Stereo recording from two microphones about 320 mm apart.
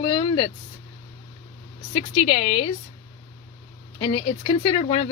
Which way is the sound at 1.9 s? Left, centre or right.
Centre.